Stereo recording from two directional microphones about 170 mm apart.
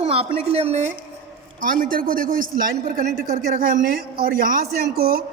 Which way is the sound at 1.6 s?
55° right (ahead or behind).